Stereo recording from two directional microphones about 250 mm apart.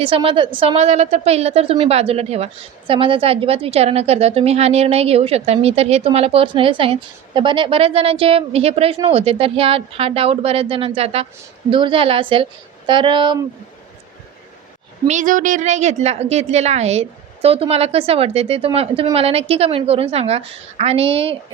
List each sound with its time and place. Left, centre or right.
0.0 s a woman's voice: right
15.0 s a woman's voice: right